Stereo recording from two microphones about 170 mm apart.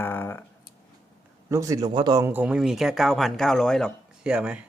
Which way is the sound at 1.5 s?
20° right (ahead or behind).